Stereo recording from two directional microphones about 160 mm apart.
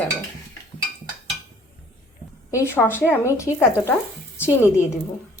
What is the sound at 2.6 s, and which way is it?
Speech, 15° left (ahead or behind).